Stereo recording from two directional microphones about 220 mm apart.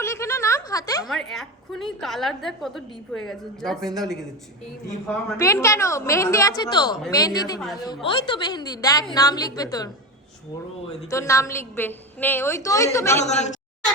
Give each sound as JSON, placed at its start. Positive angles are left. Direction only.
{"t": 0.0, "sound": "a sound", "side_deg": 15}
{"t": 1.0, "sound": "a woman's voice", "side_deg": 0}
{"t": 5.0, "sound": "a woman's voice", "side_deg": 15}
{"t": 11.1, "sound": "a woman's voice", "side_deg": 15}
{"t": 13.2, "sound": "a woman's voice", "side_deg": 30}